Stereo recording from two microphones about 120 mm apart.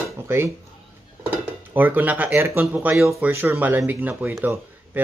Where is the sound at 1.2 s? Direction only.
15° right (ahead or behind).